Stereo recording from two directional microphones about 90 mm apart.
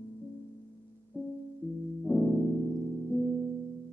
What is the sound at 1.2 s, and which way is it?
Music, 20° left (ahead or behind).